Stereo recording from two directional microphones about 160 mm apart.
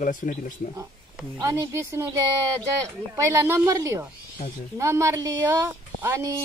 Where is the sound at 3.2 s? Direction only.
15° right (ahead or behind).